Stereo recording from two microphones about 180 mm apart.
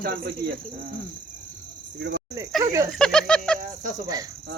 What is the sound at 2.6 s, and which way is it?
Speech, 20° right (ahead or behind).